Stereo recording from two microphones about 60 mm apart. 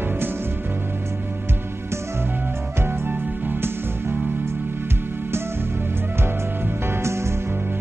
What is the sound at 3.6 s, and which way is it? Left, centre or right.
Music, right.